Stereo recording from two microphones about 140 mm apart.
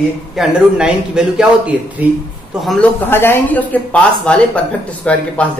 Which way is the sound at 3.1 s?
15° left (ahead or behind).